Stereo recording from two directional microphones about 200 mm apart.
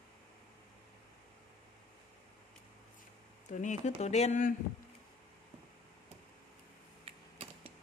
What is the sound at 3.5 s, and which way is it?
Speech, 35° left (ahead or behind).